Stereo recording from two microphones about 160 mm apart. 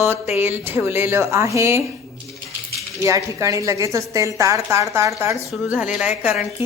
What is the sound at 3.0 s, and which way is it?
A woman's voice, 20° right (ahead or behind).